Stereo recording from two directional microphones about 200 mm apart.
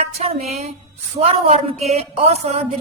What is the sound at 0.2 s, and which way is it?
A woman's voice, 35° right (ahead or behind).